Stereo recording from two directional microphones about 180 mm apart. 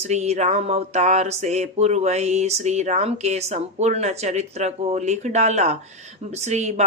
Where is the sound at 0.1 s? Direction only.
40° right (ahead or behind).